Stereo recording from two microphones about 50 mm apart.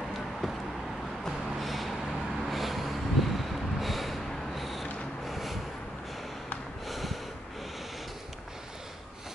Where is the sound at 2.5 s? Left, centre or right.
Centre.